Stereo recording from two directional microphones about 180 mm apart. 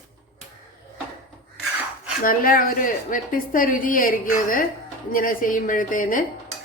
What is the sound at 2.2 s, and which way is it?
A woman's voice, 50° left (ahead or behind).